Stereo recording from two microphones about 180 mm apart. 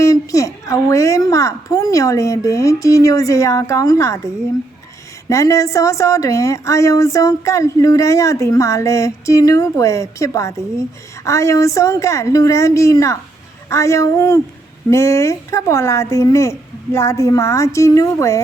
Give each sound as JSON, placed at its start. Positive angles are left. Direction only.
{"t": 0.0, "sound": "speech", "side_deg": 15}
{"t": 5.3, "sound": "speech", "side_deg": 15}